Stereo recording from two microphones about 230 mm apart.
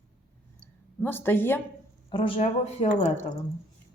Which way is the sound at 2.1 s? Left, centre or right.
Left.